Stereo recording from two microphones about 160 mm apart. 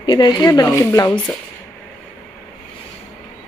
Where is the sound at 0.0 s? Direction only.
30° left (ahead or behind).